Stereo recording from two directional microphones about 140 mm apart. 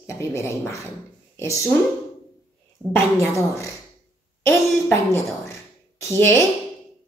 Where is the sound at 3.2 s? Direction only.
20° left (ahead or behind).